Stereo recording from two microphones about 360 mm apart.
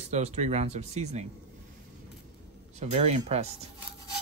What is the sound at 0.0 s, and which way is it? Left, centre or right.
Speech, centre.